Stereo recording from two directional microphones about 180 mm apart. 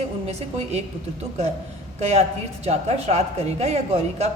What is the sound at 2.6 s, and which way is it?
A woman's voice, 35° right (ahead or behind).